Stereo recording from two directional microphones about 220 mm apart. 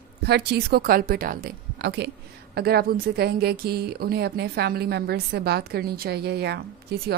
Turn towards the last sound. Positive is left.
turn(degrees=-45)  # may be behind; listen again after turning